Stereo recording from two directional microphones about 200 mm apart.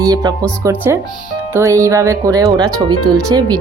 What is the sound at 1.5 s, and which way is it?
Speech, 15° right (ahead or behind).